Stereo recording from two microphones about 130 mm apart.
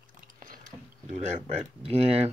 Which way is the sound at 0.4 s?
85° right.